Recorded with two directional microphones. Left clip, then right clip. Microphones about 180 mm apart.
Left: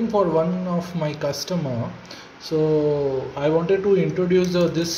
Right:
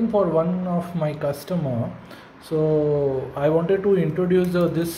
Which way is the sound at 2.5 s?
Centre (ahead or behind).